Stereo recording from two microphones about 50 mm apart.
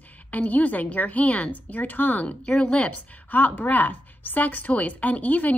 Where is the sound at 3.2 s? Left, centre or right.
Left.